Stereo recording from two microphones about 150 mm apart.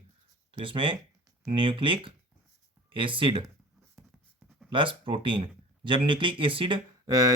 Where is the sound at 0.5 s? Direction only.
35° right (ahead or behind).